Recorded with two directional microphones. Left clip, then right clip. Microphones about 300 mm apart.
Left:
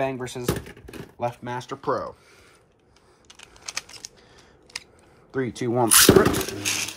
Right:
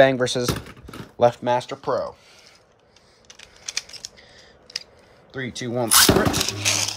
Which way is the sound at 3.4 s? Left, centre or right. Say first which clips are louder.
Right 3 dB; centre.